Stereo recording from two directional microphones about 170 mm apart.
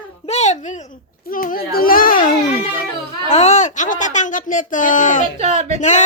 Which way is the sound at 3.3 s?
40° left (ahead or behind).